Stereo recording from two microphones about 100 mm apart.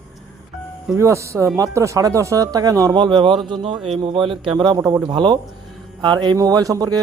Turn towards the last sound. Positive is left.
turn(degrees=-40)  # may be behind; listen again after turning